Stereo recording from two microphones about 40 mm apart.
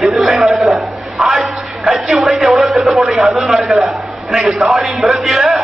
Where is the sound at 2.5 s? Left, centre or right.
Centre.